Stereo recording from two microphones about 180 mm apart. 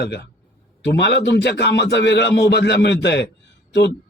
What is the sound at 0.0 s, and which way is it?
A man's voice, 65° left (ahead or behind).